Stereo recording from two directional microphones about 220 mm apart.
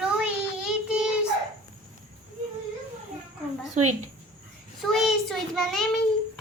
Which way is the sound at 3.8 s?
35° right (ahead or behind).